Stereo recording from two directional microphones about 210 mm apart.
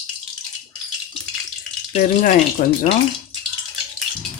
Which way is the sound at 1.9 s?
40° left (ahead or behind).